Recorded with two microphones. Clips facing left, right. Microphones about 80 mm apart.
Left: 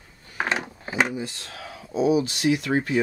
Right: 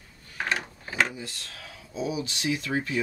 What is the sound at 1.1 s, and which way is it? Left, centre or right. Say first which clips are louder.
Speech: left 8 dB; left.